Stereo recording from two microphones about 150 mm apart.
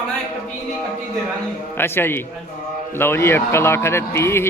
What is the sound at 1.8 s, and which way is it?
Speech, 15° left (ahead or behind).